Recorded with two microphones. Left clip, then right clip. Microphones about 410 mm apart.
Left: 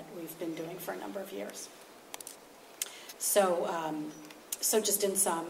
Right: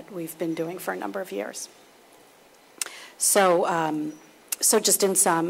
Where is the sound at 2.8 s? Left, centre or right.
Right.